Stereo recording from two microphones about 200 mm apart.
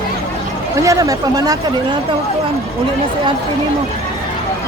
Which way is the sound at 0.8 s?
15° right (ahead or behind).